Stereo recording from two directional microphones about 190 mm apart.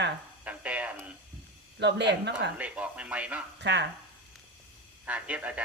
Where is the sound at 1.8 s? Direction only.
65° right (ahead or behind).